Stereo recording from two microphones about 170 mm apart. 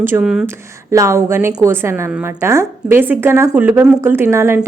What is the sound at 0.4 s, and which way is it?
A woman's voice, 15° right (ahead or behind).